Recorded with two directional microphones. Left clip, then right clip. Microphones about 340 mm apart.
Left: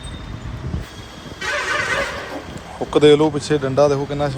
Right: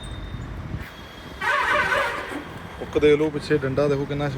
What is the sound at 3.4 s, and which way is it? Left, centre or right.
Speech, left.